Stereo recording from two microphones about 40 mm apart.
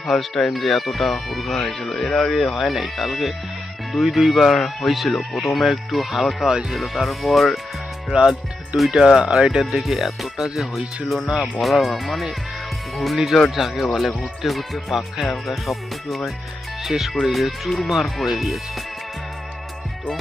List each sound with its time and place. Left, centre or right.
0.0 s speech: centre
1.5 s speech: centre
8.9 s speech: centre
9.5 s speech: centre